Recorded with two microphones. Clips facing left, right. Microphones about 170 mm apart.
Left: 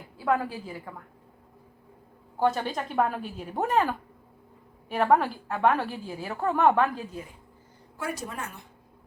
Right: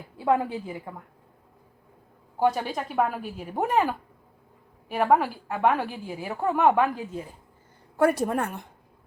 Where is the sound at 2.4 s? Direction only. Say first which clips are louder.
Right 1 dB; 10° right (ahead or behind).